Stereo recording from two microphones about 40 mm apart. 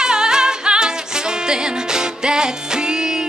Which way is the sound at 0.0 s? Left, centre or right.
Centre.